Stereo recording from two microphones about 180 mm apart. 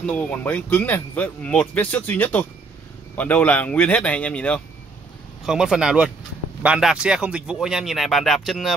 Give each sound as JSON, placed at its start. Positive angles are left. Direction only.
{"t": 0.0, "sound": "speech", "side_deg": 10}